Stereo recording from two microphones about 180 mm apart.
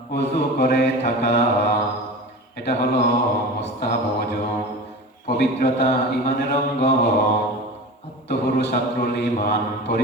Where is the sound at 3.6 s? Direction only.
60° left (ahead or behind).